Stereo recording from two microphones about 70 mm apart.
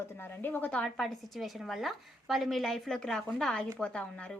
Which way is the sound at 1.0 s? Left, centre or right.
Centre.